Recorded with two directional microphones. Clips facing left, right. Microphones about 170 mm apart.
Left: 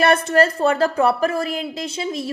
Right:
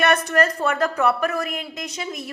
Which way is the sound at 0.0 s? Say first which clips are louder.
Left 3 dB; 30° left (ahead or behind).